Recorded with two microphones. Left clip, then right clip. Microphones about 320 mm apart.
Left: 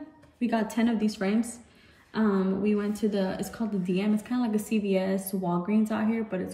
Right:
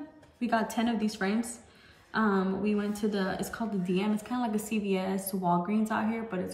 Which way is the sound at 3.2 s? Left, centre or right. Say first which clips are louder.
Left 1 dB; centre.